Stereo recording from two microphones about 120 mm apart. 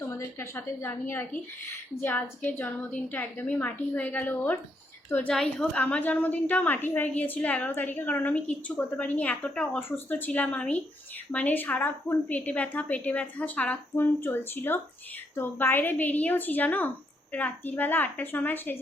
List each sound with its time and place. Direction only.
0.3 s a woman's voice: 20° left (ahead or behind)